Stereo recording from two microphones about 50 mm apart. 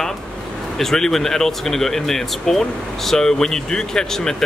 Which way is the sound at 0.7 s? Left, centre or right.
Centre.